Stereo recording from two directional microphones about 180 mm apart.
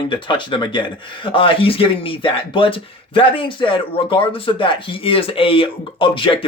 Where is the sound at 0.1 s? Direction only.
25° left (ahead or behind).